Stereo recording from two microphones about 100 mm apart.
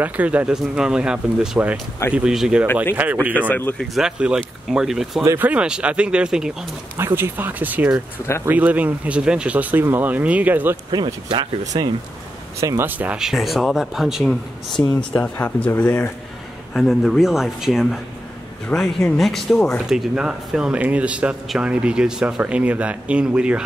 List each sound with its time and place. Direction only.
0.0 s speech: 15° right (ahead or behind)
3.3 s speech: 15° left (ahead or behind)
3.7 s speech: centre (ahead or behind)
7.0 s speech: 25° right (ahead or behind)
10.9 s speech: 50° right (ahead or behind)
12.5 s speech: 30° right (ahead or behind)
13.2 s speech: centre (ahead or behind)
15.0 s speech: 10° left (ahead or behind)
16.7 s speech: 5° left (ahead or behind)
18.7 s speech: 15° left (ahead or behind)
19.1 s speech: centre (ahead or behind)
19.9 s speech: 5° right (ahead or behind)